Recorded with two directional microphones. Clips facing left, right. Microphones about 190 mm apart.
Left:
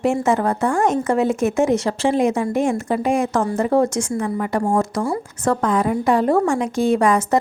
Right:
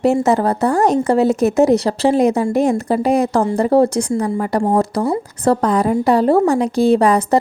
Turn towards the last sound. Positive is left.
turn(degrees=-35)  # may be behind; listen again after turning